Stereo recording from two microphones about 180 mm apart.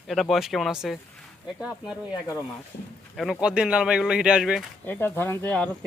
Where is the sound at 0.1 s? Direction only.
Centre (ahead or behind).